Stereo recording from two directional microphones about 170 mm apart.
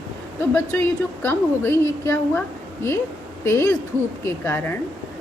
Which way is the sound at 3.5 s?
20° left (ahead or behind).